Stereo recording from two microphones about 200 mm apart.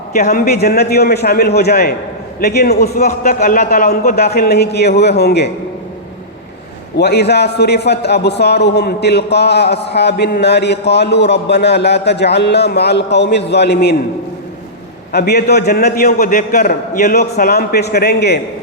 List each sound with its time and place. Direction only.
0.2 s a man's voice: 50° left (ahead or behind)
6.9 s a man's voice: 55° left (ahead or behind)
15.1 s a man's voice: 55° left (ahead or behind)
16.0 s a man's voice: 40° left (ahead or behind)